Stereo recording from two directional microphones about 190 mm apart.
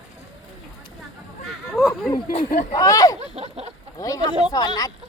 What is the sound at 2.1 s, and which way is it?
Speech, 25° left (ahead or behind).